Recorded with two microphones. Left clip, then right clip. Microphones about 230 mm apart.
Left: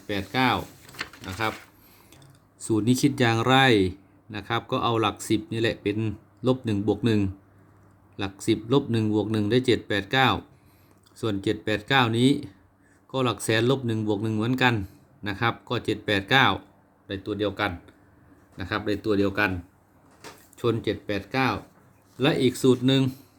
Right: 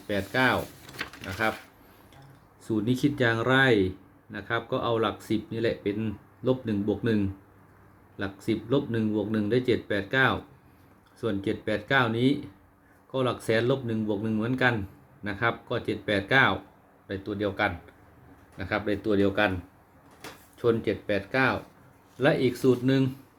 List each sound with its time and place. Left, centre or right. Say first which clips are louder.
0.1 s speech: even; left
2.6 s speech: left 4 dB; left
20.6 s speech: right 1 dB; left